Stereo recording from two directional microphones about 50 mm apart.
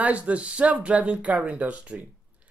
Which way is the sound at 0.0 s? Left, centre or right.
Right.